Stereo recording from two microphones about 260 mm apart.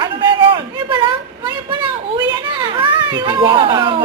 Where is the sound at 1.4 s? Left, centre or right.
Centre.